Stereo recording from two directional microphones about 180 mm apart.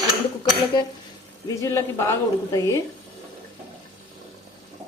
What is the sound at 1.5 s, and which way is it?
A woman's voice, 15° left (ahead or behind).